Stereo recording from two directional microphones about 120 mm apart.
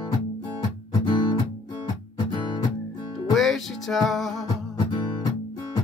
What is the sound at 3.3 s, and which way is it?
Music, centre (ahead or behind).